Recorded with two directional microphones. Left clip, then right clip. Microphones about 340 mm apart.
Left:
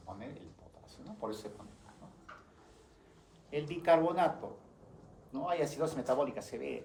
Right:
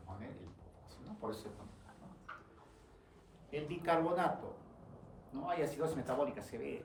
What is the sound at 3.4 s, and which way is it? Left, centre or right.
Speech, centre.